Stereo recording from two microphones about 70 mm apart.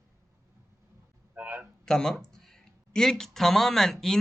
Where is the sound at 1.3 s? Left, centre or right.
Right.